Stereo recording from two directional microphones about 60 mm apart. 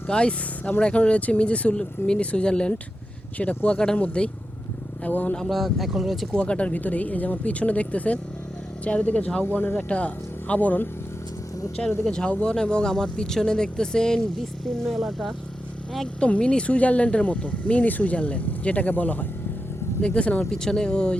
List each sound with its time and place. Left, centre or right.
0.1 s speech: centre
5.4 s speech: centre
6.3 s speech: centre
11.8 s speech: centre
16.2 s speech: centre